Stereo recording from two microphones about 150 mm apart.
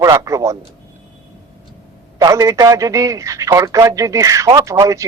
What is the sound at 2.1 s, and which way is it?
Speech, 20° right (ahead or behind).